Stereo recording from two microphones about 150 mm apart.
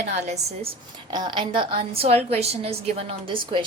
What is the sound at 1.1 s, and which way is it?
A woman's voice, 30° right (ahead or behind).